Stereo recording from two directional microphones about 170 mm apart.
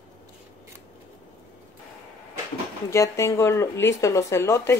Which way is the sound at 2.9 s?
15° left (ahead or behind).